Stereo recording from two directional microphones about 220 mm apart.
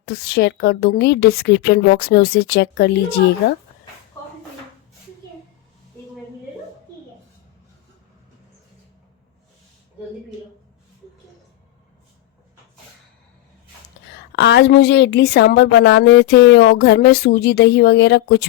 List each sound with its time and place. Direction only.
0.0 s a woman's voice: 45° left (ahead or behind)
14.3 s a woman's voice: 55° left (ahead or behind)